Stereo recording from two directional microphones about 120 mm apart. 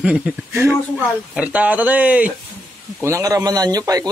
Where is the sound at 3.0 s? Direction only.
25° right (ahead or behind).